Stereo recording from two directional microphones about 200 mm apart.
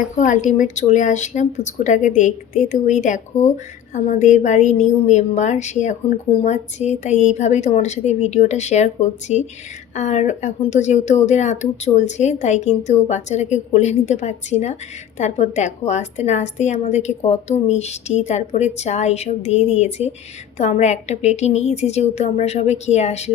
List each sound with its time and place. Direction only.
0.2 s speech: 40° left (ahead or behind)